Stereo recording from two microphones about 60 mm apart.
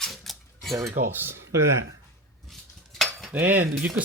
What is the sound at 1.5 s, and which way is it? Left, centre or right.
Speech, right.